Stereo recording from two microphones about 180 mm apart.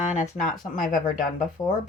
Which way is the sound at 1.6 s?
15° left (ahead or behind).